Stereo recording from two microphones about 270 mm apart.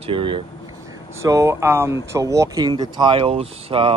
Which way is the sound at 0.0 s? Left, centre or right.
Centre.